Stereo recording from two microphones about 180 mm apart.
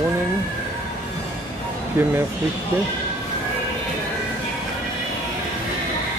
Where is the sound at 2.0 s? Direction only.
15° right (ahead or behind).